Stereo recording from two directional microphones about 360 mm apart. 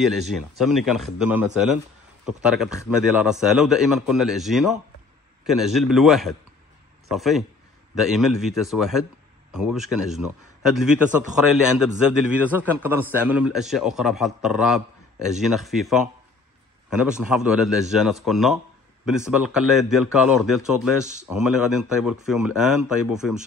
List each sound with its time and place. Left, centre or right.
0.3 s a man's voice: centre
21.0 s speech: centre
21.3 s a man's voice: centre